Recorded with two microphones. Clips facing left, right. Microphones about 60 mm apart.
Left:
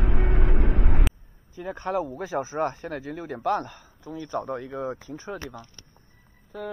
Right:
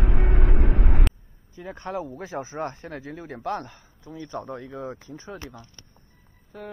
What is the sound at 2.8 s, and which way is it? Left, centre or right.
A man's voice, left.